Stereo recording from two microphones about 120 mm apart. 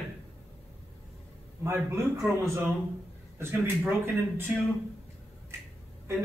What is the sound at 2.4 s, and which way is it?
Speech, 20° right (ahead or behind).